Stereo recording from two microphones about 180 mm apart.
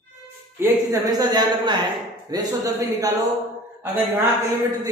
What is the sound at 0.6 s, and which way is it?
A woman's voice, 10° right (ahead or behind).